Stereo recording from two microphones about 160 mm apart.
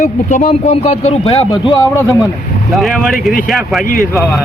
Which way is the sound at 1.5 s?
20° left (ahead or behind).